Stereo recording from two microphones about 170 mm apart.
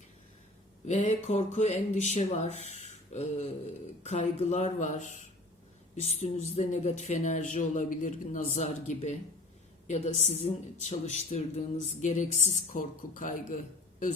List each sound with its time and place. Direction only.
0.9 s speech: 40° left (ahead or behind)
2.6 s a sound: 40° left (ahead or behind)
4.0 s a man's voice: 45° left (ahead or behind)